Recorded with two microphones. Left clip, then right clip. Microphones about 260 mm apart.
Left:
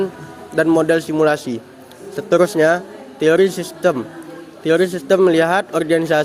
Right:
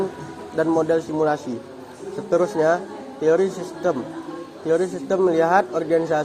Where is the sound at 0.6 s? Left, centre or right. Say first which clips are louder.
Left 5 dB; left.